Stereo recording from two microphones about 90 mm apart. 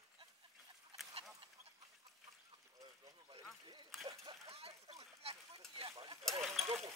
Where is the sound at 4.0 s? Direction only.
35° right (ahead or behind).